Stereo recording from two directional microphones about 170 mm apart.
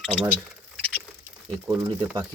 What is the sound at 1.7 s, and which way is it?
Speech, 20° right (ahead or behind).